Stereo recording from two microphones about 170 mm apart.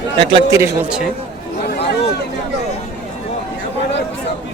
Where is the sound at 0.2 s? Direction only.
30° right (ahead or behind).